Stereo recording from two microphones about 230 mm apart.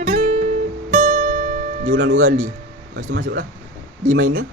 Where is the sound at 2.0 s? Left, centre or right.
Right.